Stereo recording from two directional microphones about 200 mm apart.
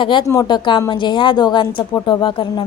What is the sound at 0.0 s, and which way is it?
A woman's voice, 25° left (ahead or behind).